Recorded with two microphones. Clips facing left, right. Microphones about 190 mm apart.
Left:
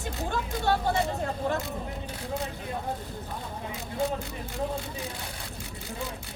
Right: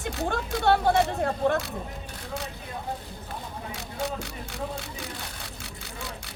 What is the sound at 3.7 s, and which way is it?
Speech, 80° right.